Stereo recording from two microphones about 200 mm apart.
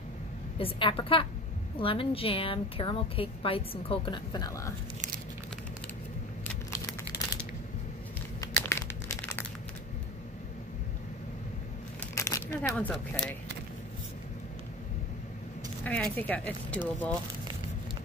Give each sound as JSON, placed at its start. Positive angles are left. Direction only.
{"t": 0.6, "sound": "a woman's voice", "side_deg": 25}
{"t": 8.4, "sound": "crumpling", "side_deg": 15}
{"t": 12.2, "sound": "crumpling", "side_deg": 15}
{"t": 12.7, "sound": "speech", "side_deg": 5}
{"t": 15.8, "sound": "speech", "side_deg": 10}